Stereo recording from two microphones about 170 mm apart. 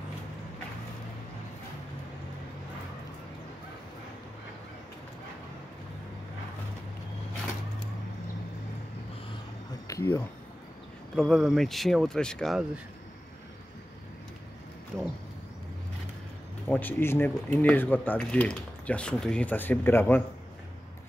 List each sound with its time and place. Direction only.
9.8 s a sound: 15° left (ahead or behind)
11.1 s speech: centre (ahead or behind)
16.6 s speech: 10° left (ahead or behind)